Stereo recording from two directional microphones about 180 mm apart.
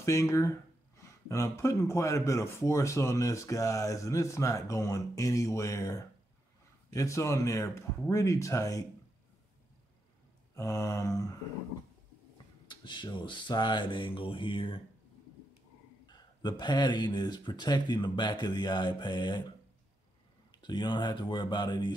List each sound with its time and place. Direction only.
0.0 s speech: 15° left (ahead or behind)
10.5 s speech: 15° left (ahead or behind)
12.6 s speech: 25° left (ahead or behind)
16.1 s speech: 25° left (ahead or behind)
20.5 s speech: 25° left (ahead or behind)